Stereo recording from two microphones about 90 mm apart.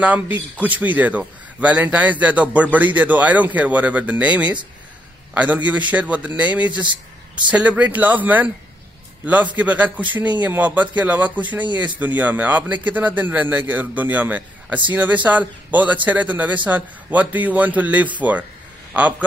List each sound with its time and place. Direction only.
0.0 s a man's voice: 15° right (ahead or behind)
6.7 s speech: 60° right (ahead or behind)
7.5 s a man's voice: 15° right (ahead or behind)